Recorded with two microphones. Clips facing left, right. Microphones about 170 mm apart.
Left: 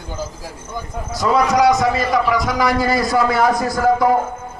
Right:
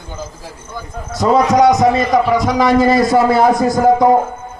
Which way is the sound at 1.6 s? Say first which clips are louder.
Right 4 dB; 20° right (ahead or behind).